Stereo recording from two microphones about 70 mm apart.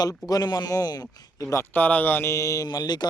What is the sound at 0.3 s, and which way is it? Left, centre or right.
Speech, left.